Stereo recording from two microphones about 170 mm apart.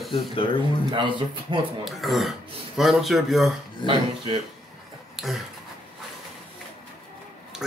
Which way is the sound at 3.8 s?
25° left (ahead or behind).